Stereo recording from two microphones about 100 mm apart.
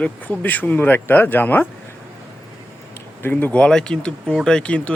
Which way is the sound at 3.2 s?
20° left (ahead or behind).